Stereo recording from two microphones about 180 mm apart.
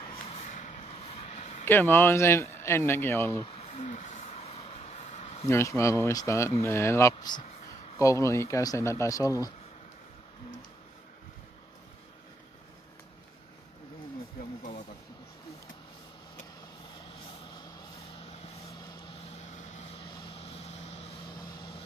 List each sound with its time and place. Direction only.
0.3 s vehicle: 40° left (ahead or behind)
1.7 s speech: 15° left (ahead or behind)
3.6 s a sound: 35° left (ahead or behind)
5.5 s speech: 15° left (ahead or behind)
19.3 s vehicle: 40° left (ahead or behind)